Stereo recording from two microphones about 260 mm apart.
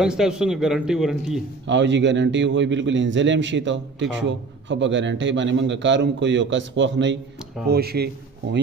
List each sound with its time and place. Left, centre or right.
0.0 s a man's voice: centre
1.7 s a man's voice: right